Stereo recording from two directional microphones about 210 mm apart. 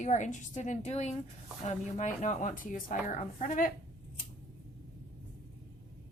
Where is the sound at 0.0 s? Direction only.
35° left (ahead or behind).